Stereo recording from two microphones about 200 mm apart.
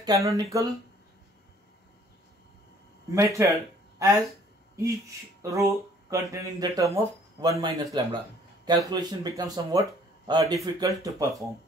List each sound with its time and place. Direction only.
0.0 s speech: 15° right (ahead or behind)
3.1 s speech: 15° right (ahead or behind)
4.7 s speech: 15° right (ahead or behind)